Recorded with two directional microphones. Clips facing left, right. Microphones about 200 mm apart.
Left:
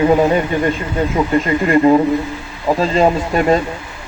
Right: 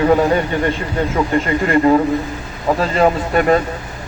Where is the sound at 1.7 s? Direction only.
15° left (ahead or behind).